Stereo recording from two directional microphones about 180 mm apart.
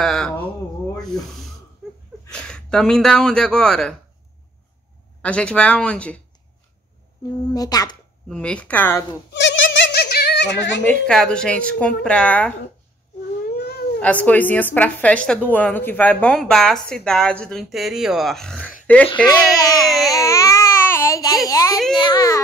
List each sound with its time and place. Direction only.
0.0 s a sound: centre (ahead or behind)
1.8 s a sound: centre (ahead or behind)
2.3 s speech: 5° left (ahead or behind)
5.2 s a woman's voice: 5° left (ahead or behind)
7.2 s speech: 20° left (ahead or behind)
8.3 s a woman's voice: 5° left (ahead or behind)
9.3 s a sound: 80° left
10.9 s a woman's voice: 5° left (ahead or behind)
13.5 s cat: 65° left (ahead or behind)
13.9 s a woman's voice: 10° left (ahead or behind)
19.5 s speech: 20° left (ahead or behind)
20.2 s baby cry: 15° left (ahead or behind)
21.5 s speech: 20° left (ahead or behind)